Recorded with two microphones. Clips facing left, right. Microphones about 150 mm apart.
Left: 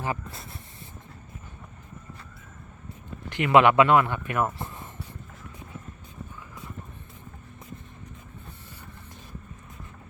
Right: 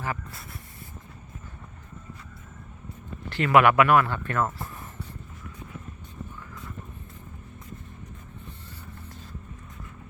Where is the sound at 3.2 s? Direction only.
15° left (ahead or behind).